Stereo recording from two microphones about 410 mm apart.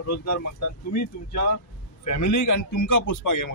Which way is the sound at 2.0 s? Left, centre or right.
Left.